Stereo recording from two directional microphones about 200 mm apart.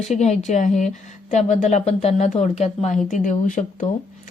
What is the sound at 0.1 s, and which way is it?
Speech, 35° left (ahead or behind).